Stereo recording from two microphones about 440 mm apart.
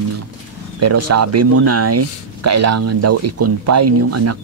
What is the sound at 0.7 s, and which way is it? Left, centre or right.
Speech, right.